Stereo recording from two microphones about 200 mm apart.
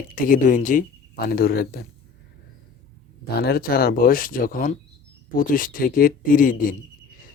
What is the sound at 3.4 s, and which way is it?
Speech, 50° left (ahead or behind).